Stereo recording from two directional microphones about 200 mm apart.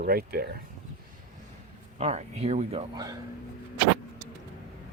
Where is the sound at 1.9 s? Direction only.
30° right (ahead or behind).